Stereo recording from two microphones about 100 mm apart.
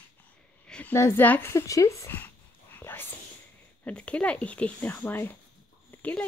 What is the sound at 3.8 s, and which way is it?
Speech, 10° left (ahead or behind).